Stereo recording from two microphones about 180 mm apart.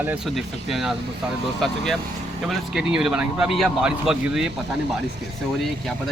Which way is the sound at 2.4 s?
5° right (ahead or behind).